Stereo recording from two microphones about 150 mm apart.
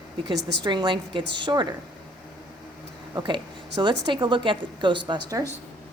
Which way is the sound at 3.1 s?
30° right (ahead or behind).